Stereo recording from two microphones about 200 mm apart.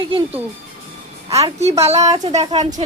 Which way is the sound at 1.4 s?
30° right (ahead or behind).